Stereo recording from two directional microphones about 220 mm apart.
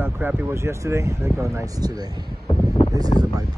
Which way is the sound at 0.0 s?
10° right (ahead or behind).